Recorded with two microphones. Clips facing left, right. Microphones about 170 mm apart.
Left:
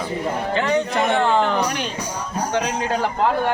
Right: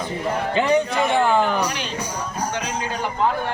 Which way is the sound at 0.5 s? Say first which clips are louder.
Right 2 dB; 15° right (ahead or behind).